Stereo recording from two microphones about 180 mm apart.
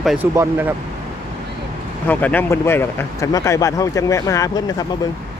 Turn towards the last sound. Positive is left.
turn(degrees=20)  # may be behind; listen again after turning